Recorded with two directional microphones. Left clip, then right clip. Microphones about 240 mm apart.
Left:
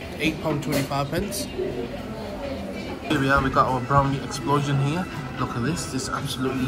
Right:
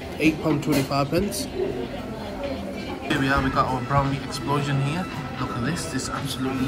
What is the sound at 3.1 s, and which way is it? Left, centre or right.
Speech, centre.